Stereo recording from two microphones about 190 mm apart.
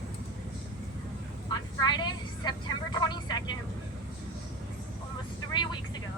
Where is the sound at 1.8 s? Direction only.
20° left (ahead or behind).